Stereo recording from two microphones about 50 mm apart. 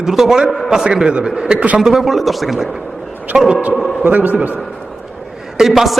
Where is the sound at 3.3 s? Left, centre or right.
Centre.